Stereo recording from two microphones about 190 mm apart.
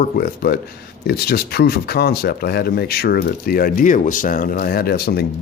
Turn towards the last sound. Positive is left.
turn(degrees=55)  # may be behind; listen again after turning